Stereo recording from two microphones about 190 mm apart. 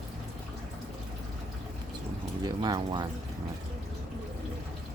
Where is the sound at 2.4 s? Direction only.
20° right (ahead or behind).